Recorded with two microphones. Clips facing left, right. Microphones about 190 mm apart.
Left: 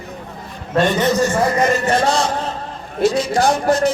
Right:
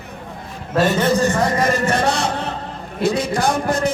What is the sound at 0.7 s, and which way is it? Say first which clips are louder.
Speech: left 1 dB; 5° right (ahead or behind).